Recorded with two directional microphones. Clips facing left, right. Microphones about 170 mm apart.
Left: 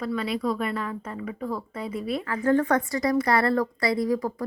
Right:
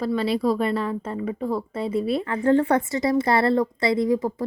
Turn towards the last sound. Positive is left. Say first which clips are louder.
# right 3 dB
turn(degrees=-25)  # may be behind; listen again after turning